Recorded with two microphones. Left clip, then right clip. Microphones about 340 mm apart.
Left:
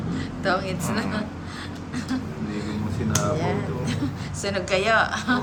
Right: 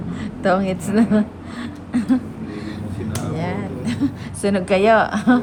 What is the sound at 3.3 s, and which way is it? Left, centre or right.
A woman's voice, right.